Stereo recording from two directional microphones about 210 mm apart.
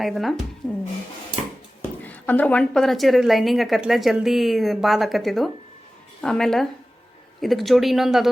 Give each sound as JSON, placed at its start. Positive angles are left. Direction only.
{"t": 0.0, "sound": "a woman's voice", "side_deg": 0}
{"t": 1.8, "sound": "a woman's voice", "side_deg": 5}